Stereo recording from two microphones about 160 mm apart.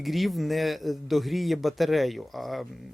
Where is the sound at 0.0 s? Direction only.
Centre (ahead or behind).